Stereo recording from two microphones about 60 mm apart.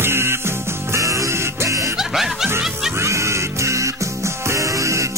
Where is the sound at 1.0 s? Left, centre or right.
Right.